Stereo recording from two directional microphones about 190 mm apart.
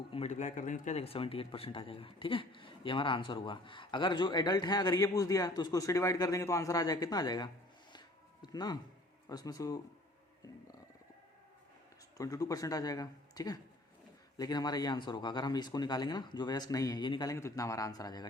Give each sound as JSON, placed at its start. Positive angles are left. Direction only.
{"t": 0.1, "sound": "speech", "side_deg": 35}
{"t": 7.9, "sound": "a sound", "side_deg": 20}
{"t": 9.3, "sound": "speech", "side_deg": 20}
{"t": 12.1, "sound": "speech", "side_deg": 15}